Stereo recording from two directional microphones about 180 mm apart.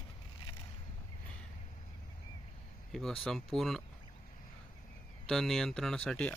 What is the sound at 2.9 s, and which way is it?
Speech, centre (ahead or behind).